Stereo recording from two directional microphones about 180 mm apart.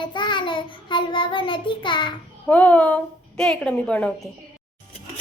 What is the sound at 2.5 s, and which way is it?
A woman's voice, 10° left (ahead or behind).